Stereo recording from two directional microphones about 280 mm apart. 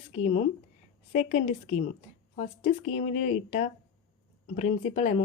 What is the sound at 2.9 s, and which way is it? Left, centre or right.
Speech, left.